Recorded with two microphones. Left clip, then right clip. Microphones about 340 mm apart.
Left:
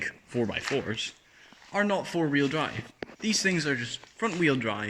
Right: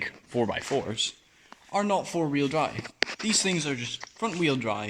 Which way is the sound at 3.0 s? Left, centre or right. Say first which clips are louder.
Right 12 dB; right.